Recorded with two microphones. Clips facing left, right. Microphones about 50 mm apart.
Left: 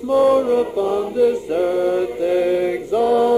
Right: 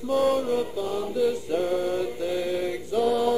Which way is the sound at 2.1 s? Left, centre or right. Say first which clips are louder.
Left 10 dB; left.